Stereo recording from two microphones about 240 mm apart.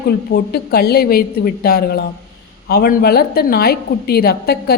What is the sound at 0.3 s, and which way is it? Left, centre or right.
A woman's voice, left.